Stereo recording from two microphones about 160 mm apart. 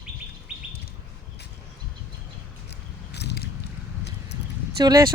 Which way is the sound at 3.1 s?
90° left.